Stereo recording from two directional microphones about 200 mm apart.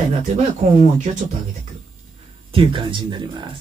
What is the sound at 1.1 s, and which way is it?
Speech, 30° right (ahead or behind).